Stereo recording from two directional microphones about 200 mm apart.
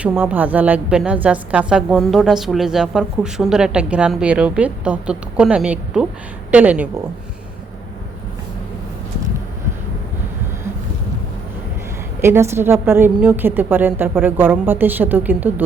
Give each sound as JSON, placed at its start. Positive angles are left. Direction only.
{"t": 0.0, "sound": "a woman's voice", "side_deg": -5}
{"t": 12.2, "sound": "a woman's voice", "side_deg": -10}